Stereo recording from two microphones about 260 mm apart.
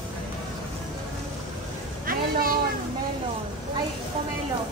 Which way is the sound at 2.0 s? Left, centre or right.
Right.